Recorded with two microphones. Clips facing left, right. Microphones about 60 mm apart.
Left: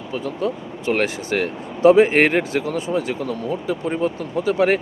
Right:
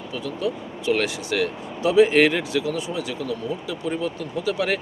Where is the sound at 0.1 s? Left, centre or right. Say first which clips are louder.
Left 3 dB; left.